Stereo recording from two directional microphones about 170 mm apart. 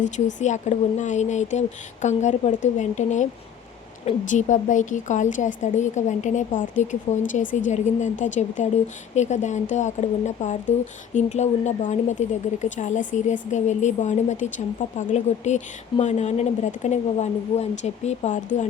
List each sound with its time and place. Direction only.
0.0 s speech: 45° left (ahead or behind)